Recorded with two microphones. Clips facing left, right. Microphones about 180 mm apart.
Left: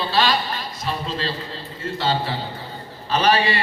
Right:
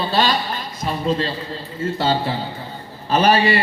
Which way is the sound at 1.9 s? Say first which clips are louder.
Right 2 dB; 40° right (ahead or behind).